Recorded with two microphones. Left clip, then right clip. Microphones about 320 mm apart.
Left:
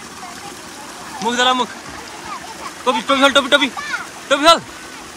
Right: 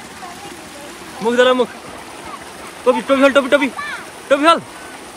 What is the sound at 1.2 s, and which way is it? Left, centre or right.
Speech, centre.